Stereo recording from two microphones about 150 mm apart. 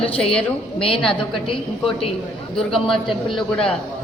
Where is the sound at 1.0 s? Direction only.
5° left (ahead or behind).